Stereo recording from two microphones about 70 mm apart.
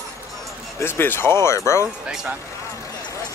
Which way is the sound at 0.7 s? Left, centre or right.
Left.